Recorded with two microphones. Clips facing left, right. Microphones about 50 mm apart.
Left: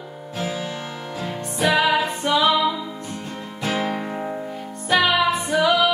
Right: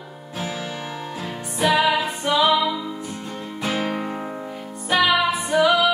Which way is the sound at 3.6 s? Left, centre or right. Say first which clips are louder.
Left 1 dB; centre.